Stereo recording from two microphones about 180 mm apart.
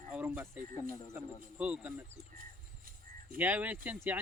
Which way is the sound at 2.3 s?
50° right (ahead or behind).